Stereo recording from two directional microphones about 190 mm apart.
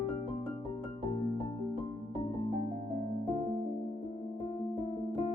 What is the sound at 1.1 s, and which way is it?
Music, 25° left (ahead or behind).